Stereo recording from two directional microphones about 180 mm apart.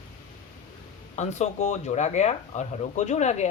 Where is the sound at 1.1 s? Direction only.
40° left (ahead or behind).